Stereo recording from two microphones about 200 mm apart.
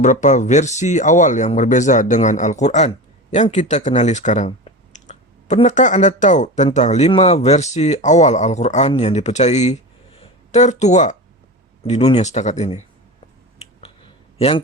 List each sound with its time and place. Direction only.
0.0 s speech: 35° left (ahead or behind)
14.3 s a man's voice: 30° left (ahead or behind)